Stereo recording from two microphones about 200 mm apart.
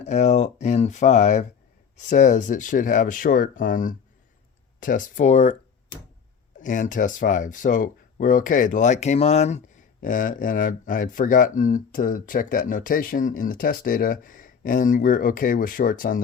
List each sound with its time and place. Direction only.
0.0 s speech: 35° left (ahead or behind)
6.6 s speech: 40° left (ahead or behind)